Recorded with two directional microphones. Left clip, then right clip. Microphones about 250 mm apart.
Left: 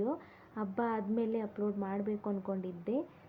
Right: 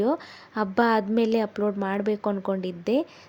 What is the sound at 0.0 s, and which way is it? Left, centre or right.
A woman's voice, right.